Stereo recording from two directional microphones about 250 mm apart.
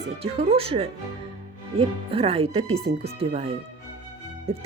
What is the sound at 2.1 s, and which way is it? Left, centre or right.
A woman's voice, right.